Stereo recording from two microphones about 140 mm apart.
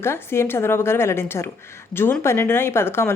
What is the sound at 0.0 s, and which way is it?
A woman's voice, 15° left (ahead or behind).